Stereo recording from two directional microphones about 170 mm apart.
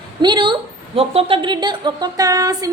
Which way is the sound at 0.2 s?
25° right (ahead or behind).